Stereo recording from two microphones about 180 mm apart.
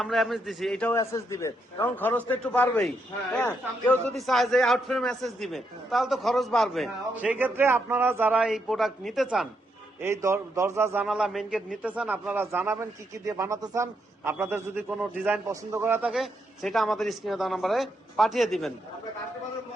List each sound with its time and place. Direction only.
0.0 s a man's voice: centre (ahead or behind)
0.9 s a man's voice: 15° left (ahead or behind); by 9.5 s 5° right (ahead or behind)
10.0 s speech: 15° right (ahead or behind)
11.0 s a man's voice: 5° right (ahead or behind)